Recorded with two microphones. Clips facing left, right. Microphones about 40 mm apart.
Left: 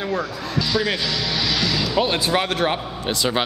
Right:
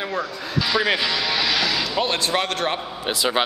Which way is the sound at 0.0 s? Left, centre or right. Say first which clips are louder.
Left 2 dB; centre.